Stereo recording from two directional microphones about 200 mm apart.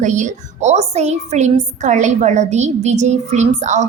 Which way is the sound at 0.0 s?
40° right (ahead or behind).